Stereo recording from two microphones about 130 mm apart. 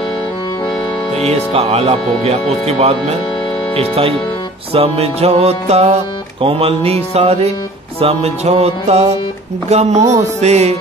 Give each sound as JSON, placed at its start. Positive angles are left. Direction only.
{"t": 1.1, "sound": "speech", "side_deg": -50}
{"t": 4.7, "sound": "music", "side_deg": -50}
{"t": 6.4, "sound": "speech", "side_deg": -50}
{"t": 8.0, "sound": "music", "side_deg": -55}